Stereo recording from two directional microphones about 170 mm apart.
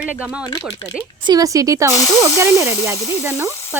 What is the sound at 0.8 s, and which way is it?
Speech, 25° left (ahead or behind).